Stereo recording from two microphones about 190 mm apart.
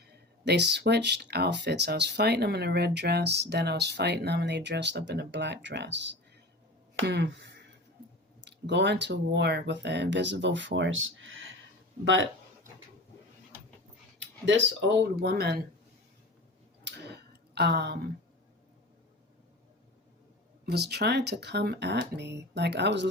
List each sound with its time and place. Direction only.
0.4 s speech: 60° right (ahead or behind); by 11.4 s 90° right
12.0 s speech: 75° right (ahead or behind)
14.2 s speech: 75° right (ahead or behind); by 15.6 s 55° right (ahead or behind)
16.8 s tick-tock: 60° right (ahead or behind)
20.7 s speech: 60° right (ahead or behind)